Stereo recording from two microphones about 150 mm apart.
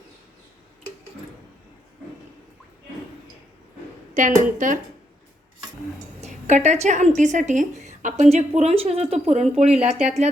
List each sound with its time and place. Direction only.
4.1 s a woman's voice: 60° right (ahead or behind)
6.2 s a woman's voice: 50° right (ahead or behind)